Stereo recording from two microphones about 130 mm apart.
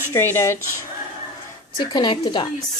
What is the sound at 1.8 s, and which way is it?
Speech, 35° left (ahead or behind).